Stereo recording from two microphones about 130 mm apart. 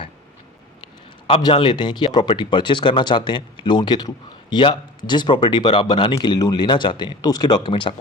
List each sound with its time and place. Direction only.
1.4 s speech: 35° left (ahead or behind)